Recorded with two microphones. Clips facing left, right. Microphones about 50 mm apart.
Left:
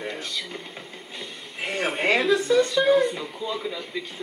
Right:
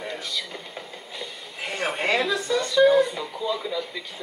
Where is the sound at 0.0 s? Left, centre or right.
Centre.